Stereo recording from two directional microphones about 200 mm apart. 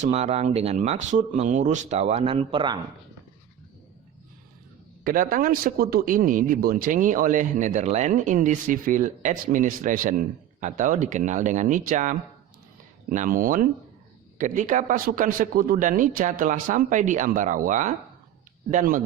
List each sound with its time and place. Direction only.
0.0 s speech: 35° right (ahead or behind)
5.0 s speech: 45° right (ahead or behind)